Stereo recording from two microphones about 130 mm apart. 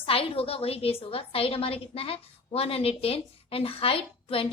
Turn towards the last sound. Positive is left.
turn(degrees=45)  # may be behind; listen again after turning